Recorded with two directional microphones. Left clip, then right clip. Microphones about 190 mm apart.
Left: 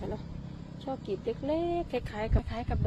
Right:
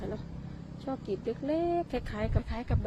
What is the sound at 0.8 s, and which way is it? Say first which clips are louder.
Speech: even; 10° right (ahead or behind).